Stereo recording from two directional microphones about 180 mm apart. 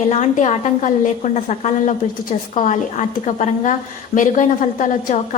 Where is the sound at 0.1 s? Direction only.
40° left (ahead or behind).